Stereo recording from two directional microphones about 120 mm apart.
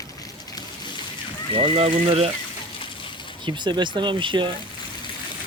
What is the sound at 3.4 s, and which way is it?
Speech, 40° right (ahead or behind).